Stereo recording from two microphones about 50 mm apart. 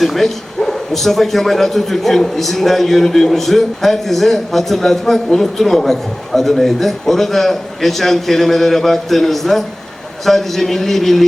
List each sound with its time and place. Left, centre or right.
0.0 s a man's voice: centre